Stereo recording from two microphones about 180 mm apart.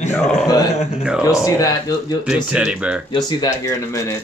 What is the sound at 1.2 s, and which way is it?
Speech, 15° left (ahead or behind).